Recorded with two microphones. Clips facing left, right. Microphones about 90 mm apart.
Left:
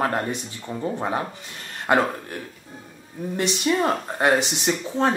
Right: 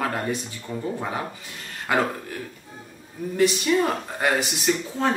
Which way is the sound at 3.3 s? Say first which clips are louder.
Right 2 dB; 25° left (ahead or behind).